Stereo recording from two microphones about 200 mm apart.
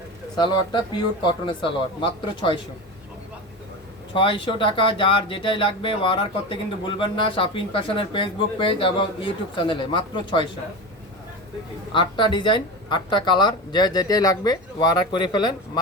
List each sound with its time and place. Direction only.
0.3 s speech: 20° left (ahead or behind)
4.1 s speech: 25° left (ahead or behind)
11.9 s speech: 25° left (ahead or behind)